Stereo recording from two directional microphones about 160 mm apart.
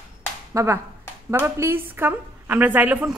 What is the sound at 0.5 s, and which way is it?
A woman's voice, 20° right (ahead or behind).